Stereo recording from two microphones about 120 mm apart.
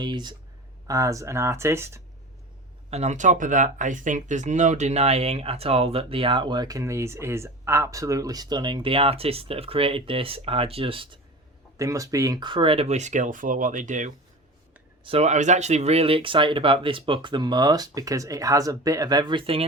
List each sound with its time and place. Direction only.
0.0 s speech: 40° right (ahead or behind); by 2.0 s 20° right (ahead or behind)
2.9 s speech: 75° right (ahead or behind); by 11.2 s 45° right (ahead or behind)
11.8 s speech: 25° right (ahead or behind); by 14.1 s 90° right
15.0 s speech: 60° right (ahead or behind)